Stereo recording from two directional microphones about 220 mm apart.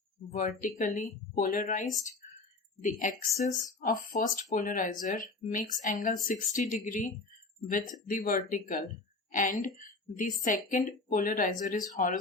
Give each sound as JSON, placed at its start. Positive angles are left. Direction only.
{"t": 0.3, "sound": "speech", "side_deg": 35}